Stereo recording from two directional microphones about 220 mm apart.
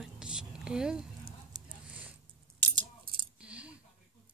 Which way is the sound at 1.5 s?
15° right (ahead or behind).